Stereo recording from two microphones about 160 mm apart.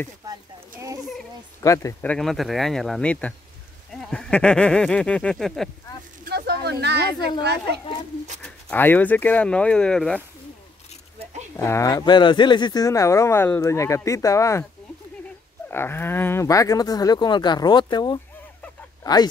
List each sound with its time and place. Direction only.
0.3 s a sound: 20° right (ahead or behind)
1.6 s speech: 20° left (ahead or behind); by 5.7 s centre (ahead or behind)
6.2 s a sound: 90° right
8.4 s speech: 5° left (ahead or behind)
11.5 s speech: 15° left (ahead or behind)
15.7 s speech: 15° left (ahead or behind)